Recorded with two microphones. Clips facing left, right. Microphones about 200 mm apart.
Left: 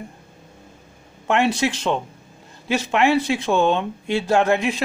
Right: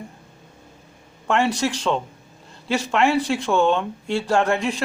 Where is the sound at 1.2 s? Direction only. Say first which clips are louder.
Left 1 dB; 20° left (ahead or behind).